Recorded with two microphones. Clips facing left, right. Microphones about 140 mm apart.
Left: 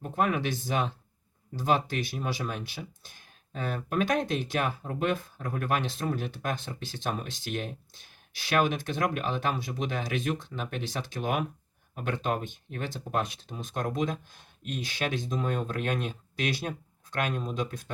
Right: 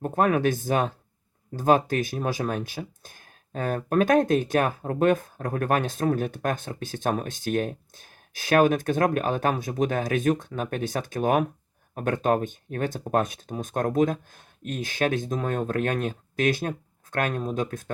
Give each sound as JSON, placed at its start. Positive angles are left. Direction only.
{"t": 0.0, "sound": "speech", "side_deg": -45}